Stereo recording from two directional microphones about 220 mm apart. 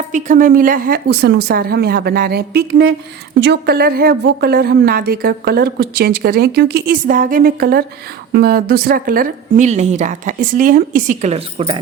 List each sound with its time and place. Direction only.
0.1 s speech: 35° right (ahead or behind)